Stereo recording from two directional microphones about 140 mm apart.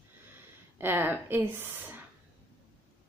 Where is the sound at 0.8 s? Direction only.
15° right (ahead or behind).